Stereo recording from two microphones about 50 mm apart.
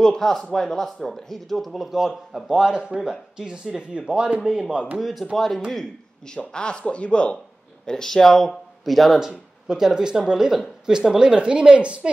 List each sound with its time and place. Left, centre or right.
0.0 s a woman's voice: centre
5.0 s speech: centre
6.5 s speech: centre
7.8 s a woman's voice: centre; by 12.1 s right